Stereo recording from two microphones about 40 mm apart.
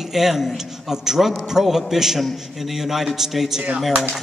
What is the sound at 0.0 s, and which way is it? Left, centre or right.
A man's voice, centre.